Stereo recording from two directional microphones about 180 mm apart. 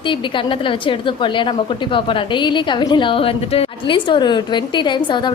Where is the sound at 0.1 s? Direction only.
25° left (ahead or behind).